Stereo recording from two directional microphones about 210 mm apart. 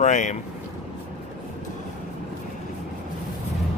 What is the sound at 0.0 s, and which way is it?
Speech, 35° left (ahead or behind).